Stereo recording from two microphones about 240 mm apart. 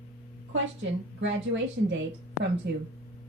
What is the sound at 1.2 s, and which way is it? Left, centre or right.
A woman's voice, right.